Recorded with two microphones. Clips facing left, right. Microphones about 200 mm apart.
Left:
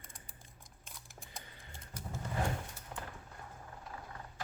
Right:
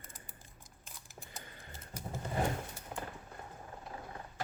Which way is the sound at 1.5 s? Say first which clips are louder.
Right 3 dB; 50° right (ahead or behind).